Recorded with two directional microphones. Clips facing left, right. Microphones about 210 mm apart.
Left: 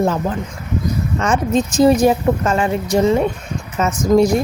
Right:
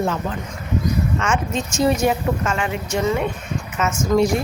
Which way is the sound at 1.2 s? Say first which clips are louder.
Left 6 dB; 35° left (ahead or behind).